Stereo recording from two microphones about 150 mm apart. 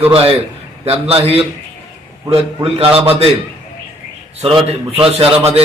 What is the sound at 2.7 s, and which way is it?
Speech, 40° right (ahead or behind).